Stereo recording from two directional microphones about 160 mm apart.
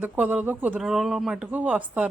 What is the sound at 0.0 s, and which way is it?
A woman's voice, 10° right (ahead or behind).